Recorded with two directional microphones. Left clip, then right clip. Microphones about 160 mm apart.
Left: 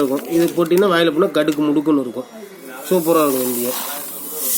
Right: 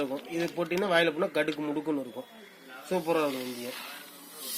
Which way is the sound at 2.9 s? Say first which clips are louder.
Left 13 dB; 25° right (ahead or behind).